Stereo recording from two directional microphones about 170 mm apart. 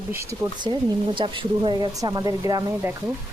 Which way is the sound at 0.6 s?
30° right (ahead or behind).